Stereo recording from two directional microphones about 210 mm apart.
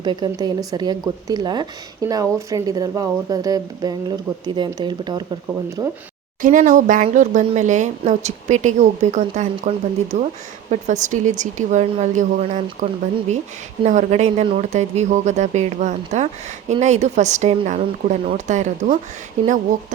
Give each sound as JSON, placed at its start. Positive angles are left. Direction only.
{"t": 0.0, "sound": "a woman's voice", "side_deg": -20}
{"t": 6.4, "sound": "speech", "side_deg": -40}